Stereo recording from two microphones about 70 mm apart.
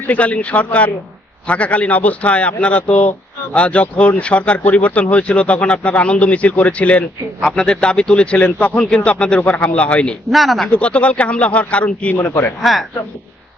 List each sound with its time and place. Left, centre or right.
0.1 s speech: centre
10.2 s speech: centre
10.7 s speech: centre